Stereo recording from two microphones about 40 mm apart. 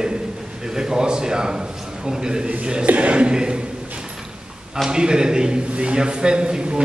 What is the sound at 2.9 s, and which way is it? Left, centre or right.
Speech, right.